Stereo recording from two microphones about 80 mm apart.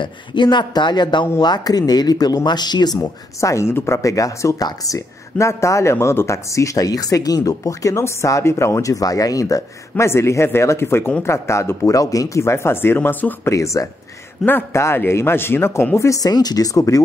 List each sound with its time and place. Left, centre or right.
0.0 s speech: left
1.4 s speech: left
3.0 s speech: left
13.5 s speech: left
14.4 s speech: left
16.1 s speech: left